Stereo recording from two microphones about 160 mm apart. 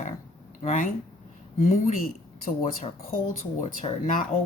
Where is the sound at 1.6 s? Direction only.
45° left (ahead or behind).